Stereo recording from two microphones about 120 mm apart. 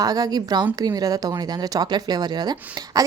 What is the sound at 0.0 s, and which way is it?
A woman's voice, 30° right (ahead or behind).